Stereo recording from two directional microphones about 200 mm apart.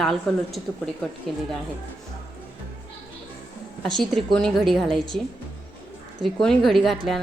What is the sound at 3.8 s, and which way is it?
A woman's voice, centre (ahead or behind).